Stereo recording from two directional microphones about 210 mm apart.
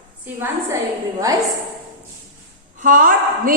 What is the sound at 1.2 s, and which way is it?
Speech, 15° right (ahead or behind).